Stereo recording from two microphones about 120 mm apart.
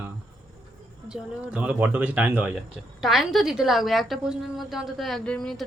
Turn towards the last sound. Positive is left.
turn(degrees=5)  # may be behind; listen again after turning